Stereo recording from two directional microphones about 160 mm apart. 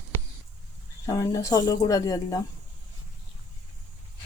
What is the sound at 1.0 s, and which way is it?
Speech, 20° left (ahead or behind).